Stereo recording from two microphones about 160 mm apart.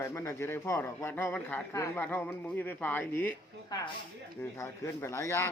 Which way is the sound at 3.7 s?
25° left (ahead or behind).